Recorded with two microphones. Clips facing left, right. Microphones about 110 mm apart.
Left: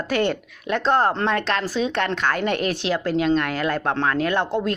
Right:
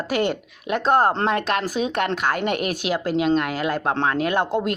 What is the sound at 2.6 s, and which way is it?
Speech, 15° right (ahead or behind).